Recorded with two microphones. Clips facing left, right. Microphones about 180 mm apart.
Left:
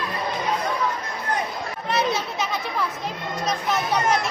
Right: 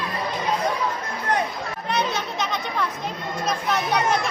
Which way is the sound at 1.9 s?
5° left (ahead or behind).